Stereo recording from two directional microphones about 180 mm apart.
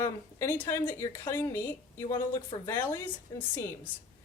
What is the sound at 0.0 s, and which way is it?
A woman's voice, 15° left (ahead or behind).